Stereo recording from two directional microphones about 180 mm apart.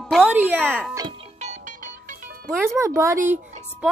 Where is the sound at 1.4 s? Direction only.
40° right (ahead or behind).